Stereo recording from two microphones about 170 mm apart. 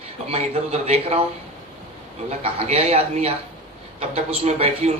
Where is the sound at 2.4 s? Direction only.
35° right (ahead or behind).